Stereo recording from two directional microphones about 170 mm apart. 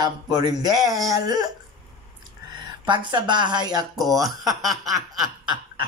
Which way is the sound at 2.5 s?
25° right (ahead or behind).